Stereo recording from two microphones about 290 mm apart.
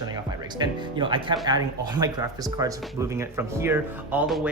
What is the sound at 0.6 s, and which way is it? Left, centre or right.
Speech, centre.